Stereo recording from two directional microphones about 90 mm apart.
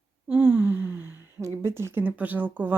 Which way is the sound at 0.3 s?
20° right (ahead or behind).